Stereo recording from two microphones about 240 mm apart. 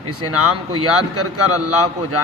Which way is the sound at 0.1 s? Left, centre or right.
Right.